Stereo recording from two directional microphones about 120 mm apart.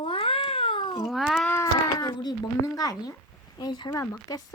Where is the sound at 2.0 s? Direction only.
35° left (ahead or behind).